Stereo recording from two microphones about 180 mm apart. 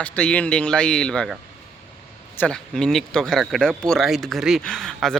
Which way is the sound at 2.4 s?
5° left (ahead or behind).